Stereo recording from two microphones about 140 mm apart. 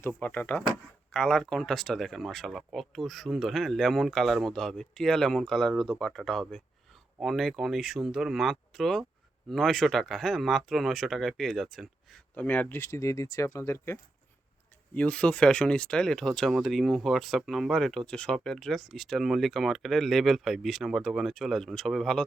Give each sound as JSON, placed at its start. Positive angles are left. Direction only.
{"t": 0.2, "sound": "speech", "side_deg": 10}
{"t": 12.3, "sound": "speech", "side_deg": 10}